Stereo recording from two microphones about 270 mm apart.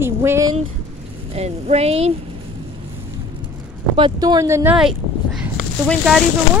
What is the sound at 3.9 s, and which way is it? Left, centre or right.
Speech, centre.